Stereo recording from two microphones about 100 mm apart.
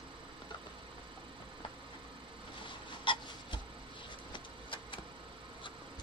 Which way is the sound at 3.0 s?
55° left (ahead or behind).